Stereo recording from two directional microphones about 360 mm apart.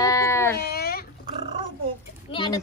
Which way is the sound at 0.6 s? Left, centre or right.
Left.